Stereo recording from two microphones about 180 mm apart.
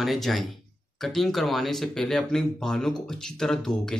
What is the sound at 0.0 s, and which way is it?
Speech, centre (ahead or behind).